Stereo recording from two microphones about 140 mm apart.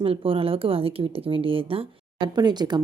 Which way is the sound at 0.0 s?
40° right (ahead or behind).